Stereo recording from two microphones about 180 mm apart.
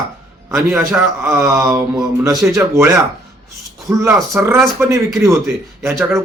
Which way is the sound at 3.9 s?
15° right (ahead or behind).